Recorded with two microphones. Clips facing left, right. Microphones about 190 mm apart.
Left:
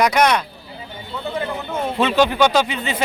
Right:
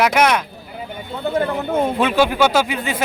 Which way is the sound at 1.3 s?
55° right (ahead or behind).